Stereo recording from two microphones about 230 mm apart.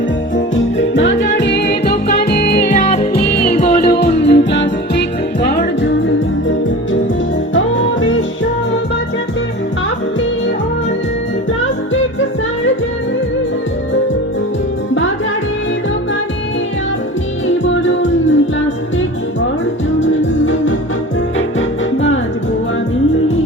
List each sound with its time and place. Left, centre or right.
0.3 s music: left
2.6 s music: left
7.5 s music: left
17.8 s music: left
20.0 s music: left